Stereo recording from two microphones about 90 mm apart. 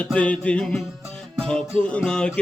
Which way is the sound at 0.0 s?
15° left (ahead or behind).